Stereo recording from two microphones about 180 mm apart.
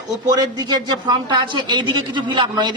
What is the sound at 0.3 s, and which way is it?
A man's voice, 20° right (ahead or behind).